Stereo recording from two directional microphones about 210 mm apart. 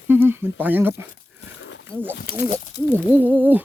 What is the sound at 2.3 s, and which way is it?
Speech, 50° left (ahead or behind).